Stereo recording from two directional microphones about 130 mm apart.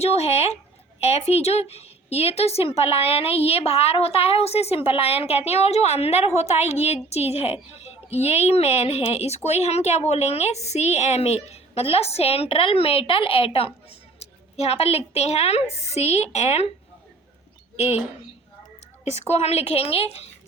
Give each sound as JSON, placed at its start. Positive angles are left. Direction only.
{"t": 0.0, "sound": "a woman's voice", "side_deg": 55}
{"t": 17.7, "sound": "a woman's voice", "side_deg": 50}
{"t": 19.1, "sound": "a woman's voice", "side_deg": 55}